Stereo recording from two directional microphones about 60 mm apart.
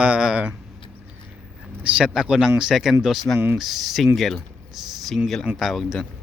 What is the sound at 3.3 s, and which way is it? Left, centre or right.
Speech, left.